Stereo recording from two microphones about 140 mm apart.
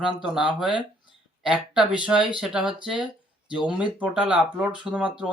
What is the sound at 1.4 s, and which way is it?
Speech, 5° right (ahead or behind).